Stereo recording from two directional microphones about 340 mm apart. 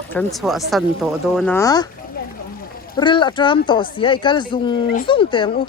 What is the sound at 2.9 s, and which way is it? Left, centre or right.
Speech, centre.